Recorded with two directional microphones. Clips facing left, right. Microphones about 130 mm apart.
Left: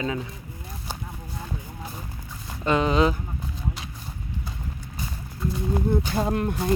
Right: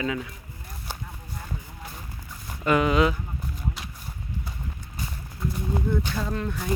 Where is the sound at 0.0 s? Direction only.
25° left (ahead or behind).